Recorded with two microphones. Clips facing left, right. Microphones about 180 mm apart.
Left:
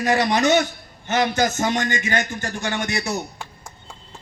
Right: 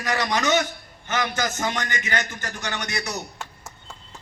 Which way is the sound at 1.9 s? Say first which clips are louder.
Left 4 dB; 25° left (ahead or behind).